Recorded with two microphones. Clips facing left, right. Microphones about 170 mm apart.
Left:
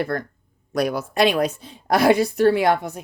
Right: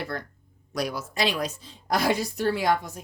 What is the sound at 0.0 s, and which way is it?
A woman's voice, 50° left (ahead or behind).